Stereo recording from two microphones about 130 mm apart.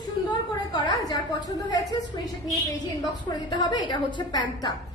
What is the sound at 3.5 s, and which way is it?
A woman's voice, 35° left (ahead or behind).